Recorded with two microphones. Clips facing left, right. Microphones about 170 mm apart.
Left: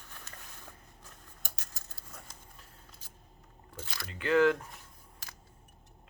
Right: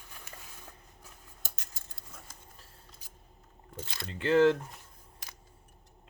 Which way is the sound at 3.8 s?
25° right (ahead or behind).